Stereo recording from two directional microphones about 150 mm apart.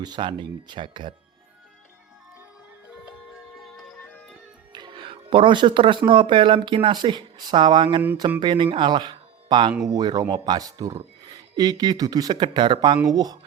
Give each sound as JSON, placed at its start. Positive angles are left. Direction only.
{"t": 0.0, "sound": "speech", "side_deg": -30}
{"t": 3.6, "sound": "music", "side_deg": 0}
{"t": 4.7, "sound": "music", "side_deg": -30}
{"t": 6.1, "sound": "speech", "side_deg": -35}